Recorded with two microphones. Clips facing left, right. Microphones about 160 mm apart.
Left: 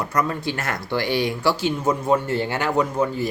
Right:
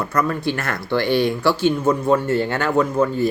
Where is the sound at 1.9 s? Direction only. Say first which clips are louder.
Even; 20° left (ahead or behind).